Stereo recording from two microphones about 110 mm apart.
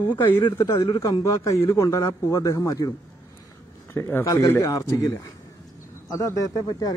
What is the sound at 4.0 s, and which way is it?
A man's voice, 20° left (ahead or behind).